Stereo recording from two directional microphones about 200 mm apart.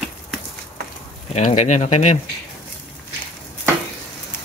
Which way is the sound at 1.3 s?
35° left (ahead or behind).